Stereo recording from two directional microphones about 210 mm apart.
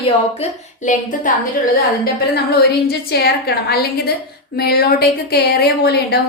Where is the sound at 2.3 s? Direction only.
50° left (ahead or behind).